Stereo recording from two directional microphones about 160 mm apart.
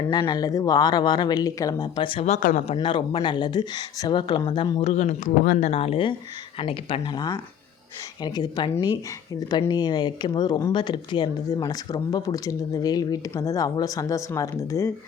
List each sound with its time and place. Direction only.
0.1 s speech: 25° left (ahead or behind)
2.5 s speech: 50° left (ahead or behind)
2.7 s speech: 30° left (ahead or behind)